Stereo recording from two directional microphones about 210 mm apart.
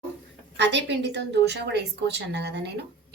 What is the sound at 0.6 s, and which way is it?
A woman's voice, 55° right (ahead or behind).